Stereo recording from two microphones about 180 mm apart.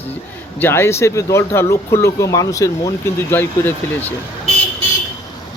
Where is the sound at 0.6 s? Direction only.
15° left (ahead or behind).